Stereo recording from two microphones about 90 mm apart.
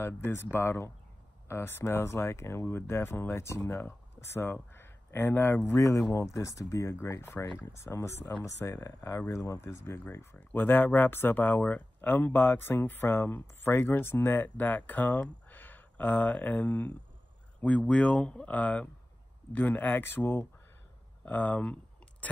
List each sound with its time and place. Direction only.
0.0 s speech: 30° left (ahead or behind)
5.7 s speech: 35° left (ahead or behind)
10.3 s speech: 20° left (ahead or behind)